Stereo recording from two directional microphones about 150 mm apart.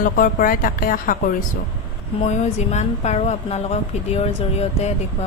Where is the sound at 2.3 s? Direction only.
50° left (ahead or behind).